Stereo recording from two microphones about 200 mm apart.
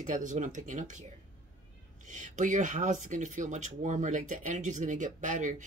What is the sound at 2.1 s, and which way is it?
Speech, 40° right (ahead or behind).